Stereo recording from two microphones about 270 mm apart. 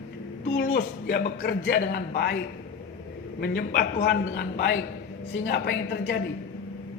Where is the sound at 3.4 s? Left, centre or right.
Left.